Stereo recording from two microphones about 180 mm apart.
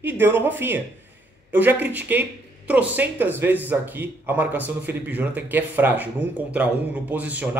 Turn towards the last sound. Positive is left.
turn(degrees=-10)  # may be behind; listen again after turning